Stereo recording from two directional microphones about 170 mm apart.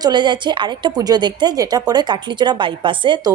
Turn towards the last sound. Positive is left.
turn(degrees=-25)  # may be behind; listen again after turning